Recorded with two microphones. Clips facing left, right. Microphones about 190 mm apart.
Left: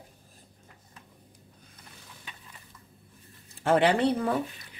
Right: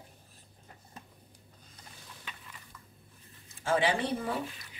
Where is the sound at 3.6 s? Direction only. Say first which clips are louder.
Left 6 dB; 65° left (ahead or behind).